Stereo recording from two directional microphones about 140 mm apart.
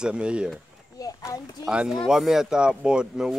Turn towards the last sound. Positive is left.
turn(degrees=-5)  # may be behind; listen again after turning